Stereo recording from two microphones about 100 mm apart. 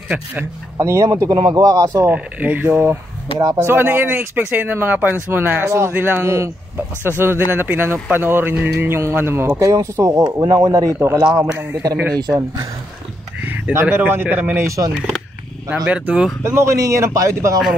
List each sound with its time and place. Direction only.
0.1 s speech: 20° right (ahead or behind)
0.7 s speech: 30° right (ahead or behind)
1.3 s a man's voice: 40° right (ahead or behind)
2.0 s a man's voice: 15° right (ahead or behind); by 12.6 s 35° right (ahead or behind)
13.4 s speech: 15° right (ahead or behind)
15.0 s speech: centre (ahead or behind)
15.7 s speech: 15° right (ahead or behind)
16.4 s a man's voice: 30° right (ahead or behind)